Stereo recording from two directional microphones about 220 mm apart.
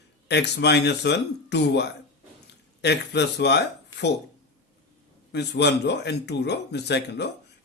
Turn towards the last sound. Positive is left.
turn(degrees=50)  # may be behind; listen again after turning